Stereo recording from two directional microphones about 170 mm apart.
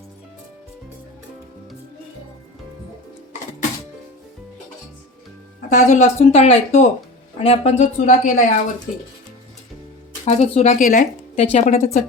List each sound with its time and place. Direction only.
5.5 s speech: 50° left (ahead or behind)
10.2 s speech: 40° left (ahead or behind)